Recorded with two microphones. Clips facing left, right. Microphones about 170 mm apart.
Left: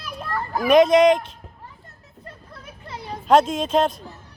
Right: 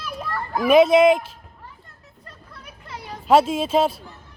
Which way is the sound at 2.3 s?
25° left (ahead or behind).